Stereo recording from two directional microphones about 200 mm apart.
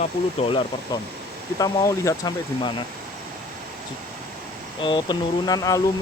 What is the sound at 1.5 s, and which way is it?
Speech, 15° left (ahead or behind).